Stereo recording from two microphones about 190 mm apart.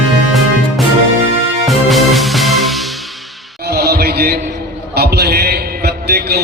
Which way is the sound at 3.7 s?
55° right (ahead or behind).